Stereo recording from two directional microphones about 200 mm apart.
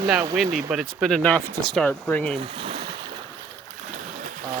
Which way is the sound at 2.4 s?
25° right (ahead or behind).